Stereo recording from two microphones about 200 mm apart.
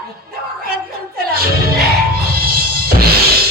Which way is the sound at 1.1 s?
50° right (ahead or behind).